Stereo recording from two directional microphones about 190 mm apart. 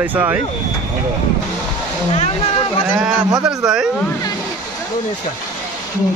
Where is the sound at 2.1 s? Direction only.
30° left (ahead or behind).